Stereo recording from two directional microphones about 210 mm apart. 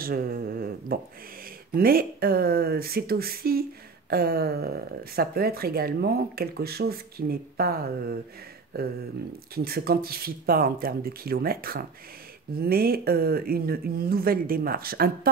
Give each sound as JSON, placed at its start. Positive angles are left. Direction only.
{"t": 0.0, "sound": "speech", "side_deg": -45}